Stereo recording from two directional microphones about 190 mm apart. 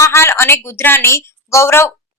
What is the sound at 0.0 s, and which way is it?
A woman's voice, 15° left (ahead or behind).